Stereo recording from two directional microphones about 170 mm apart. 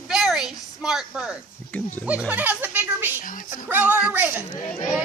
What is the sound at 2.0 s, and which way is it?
A woman's voice, 10° right (ahead or behind).